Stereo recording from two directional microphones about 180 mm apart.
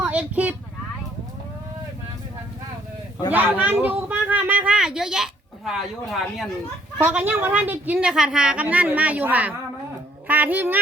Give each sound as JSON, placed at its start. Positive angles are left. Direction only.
{"t": 0.0, "sound": "speech", "side_deg": -10}
{"t": 3.3, "sound": "a woman's voice", "side_deg": -10}